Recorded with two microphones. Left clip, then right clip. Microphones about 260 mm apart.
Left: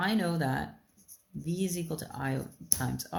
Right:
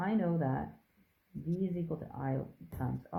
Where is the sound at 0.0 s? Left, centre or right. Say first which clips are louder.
Left 4 dB; left.